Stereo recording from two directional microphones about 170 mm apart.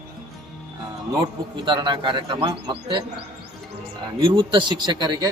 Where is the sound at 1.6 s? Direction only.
25° right (ahead or behind).